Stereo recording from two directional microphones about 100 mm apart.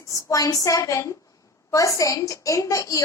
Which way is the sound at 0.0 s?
35° left (ahead or behind).